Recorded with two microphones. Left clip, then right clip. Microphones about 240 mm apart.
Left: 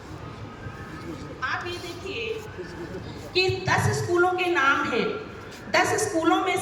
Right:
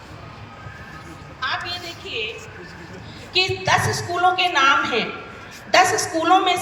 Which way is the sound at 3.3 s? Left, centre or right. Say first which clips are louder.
Right 5 dB; right.